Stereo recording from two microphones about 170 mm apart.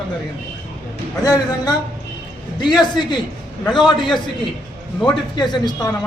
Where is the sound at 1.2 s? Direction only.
20° left (ahead or behind).